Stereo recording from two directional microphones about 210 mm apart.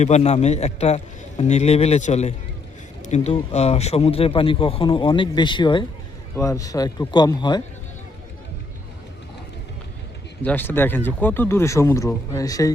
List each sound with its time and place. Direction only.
0.0 s a man's voice: 30° left (ahead or behind)
10.4 s speech: 10° left (ahead or behind)